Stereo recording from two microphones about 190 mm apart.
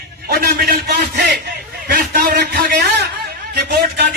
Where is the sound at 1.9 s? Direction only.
50° right (ahead or behind).